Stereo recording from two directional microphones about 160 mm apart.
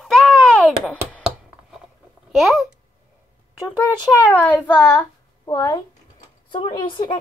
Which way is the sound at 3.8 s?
10° left (ahead or behind).